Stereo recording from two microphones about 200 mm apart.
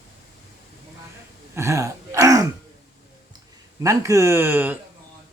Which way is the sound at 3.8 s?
15° right (ahead or behind).